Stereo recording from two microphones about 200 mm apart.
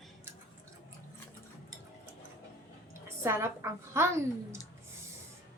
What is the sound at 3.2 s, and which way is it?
Speech, 15° right (ahead or behind).